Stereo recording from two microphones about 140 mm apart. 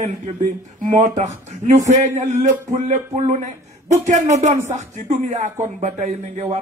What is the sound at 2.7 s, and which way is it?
Speech, 55° right (ahead or behind).